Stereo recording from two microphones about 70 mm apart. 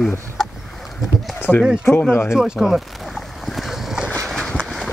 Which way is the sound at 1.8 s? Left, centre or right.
Left.